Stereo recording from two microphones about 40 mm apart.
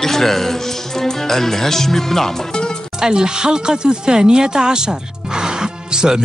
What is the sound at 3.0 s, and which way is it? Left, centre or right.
Speech, centre.